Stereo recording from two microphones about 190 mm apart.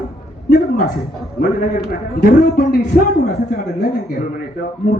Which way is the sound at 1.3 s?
55° left (ahead or behind).